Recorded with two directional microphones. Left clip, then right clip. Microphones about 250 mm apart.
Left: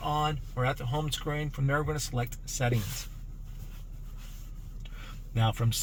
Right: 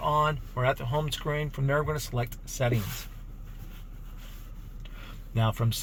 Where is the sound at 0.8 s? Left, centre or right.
Right.